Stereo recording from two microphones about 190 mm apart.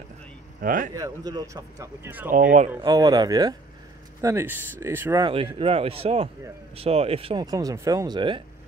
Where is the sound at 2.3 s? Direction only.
40° right (ahead or behind).